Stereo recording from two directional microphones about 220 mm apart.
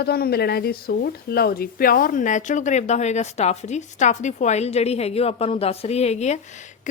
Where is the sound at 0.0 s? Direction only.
45° left (ahead or behind).